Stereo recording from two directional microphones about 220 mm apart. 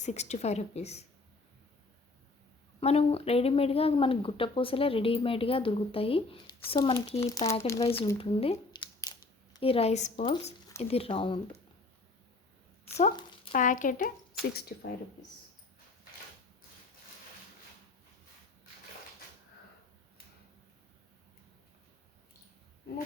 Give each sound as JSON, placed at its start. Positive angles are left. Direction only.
{"t": 0.0, "sound": "a woman's voice", "side_deg": 30}
{"t": 2.8, "sound": "speech", "side_deg": 25}
{"t": 13.5, "sound": "a woman's voice", "side_deg": 35}